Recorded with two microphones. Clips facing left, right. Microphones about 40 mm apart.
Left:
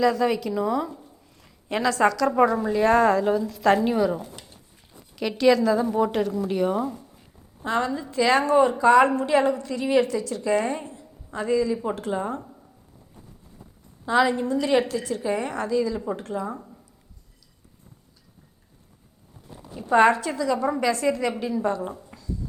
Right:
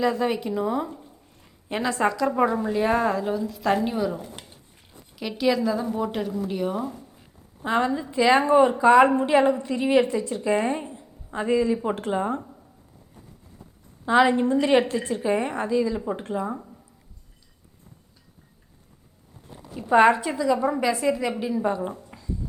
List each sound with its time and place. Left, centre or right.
0.0 s a woman's voice: right
1.7 s a woman's voice: right
2.7 s speech: centre
5.4 s a woman's voice: centre
5.7 s speech: centre
6.9 s a sound: centre
7.6 s a woman's voice: right
14.0 s a woman's voice: right
16.6 s a sound: centre
19.7 s a woman's voice: centre
22.0 s a sound: right